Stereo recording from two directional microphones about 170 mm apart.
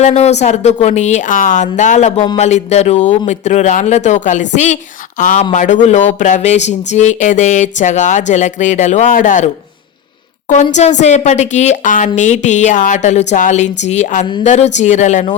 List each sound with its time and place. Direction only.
0.0 s speech: 40° left (ahead or behind)
11.0 s speech: 40° left (ahead or behind)